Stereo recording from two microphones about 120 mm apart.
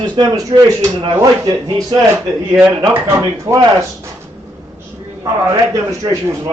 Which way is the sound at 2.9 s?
25° right (ahead or behind).